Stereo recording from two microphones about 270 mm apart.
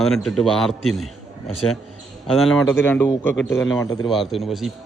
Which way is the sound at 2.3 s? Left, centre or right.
Centre.